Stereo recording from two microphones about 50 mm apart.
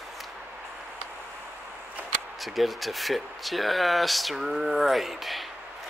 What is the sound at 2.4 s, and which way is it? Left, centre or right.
Speech, centre.